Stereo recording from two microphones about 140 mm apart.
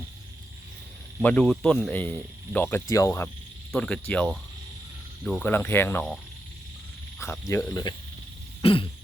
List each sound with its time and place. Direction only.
1.2 s speech: 10° left (ahead or behind)
2.9 s frog: 20° left (ahead or behind)
3.7 s speech: 5° left (ahead or behind)
5.4 s speech: 15° left (ahead or behind)
7.2 s frog: 20° left (ahead or behind)
8.6 s throat clearing: 40° left (ahead or behind)